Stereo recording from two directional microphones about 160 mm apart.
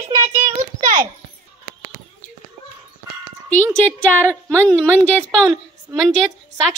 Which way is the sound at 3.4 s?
10° left (ahead or behind).